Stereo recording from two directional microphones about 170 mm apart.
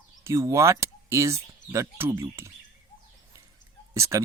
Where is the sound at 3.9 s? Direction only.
15° right (ahead or behind).